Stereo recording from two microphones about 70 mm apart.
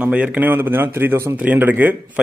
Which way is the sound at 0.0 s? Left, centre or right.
Right.